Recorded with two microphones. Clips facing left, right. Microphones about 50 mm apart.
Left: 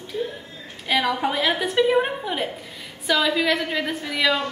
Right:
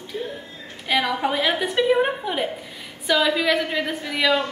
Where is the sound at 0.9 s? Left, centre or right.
Centre.